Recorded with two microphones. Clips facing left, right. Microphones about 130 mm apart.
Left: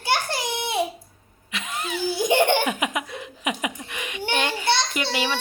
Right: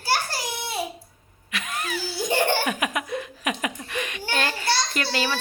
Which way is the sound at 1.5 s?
20° left (ahead or behind).